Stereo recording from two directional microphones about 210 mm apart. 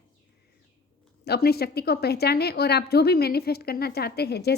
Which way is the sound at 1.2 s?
50° left (ahead or behind).